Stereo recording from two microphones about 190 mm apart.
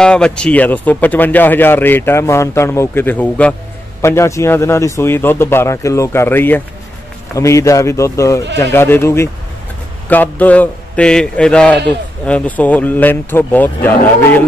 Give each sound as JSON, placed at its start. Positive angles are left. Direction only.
{"t": 0.0, "sound": "speech", "side_deg": 5}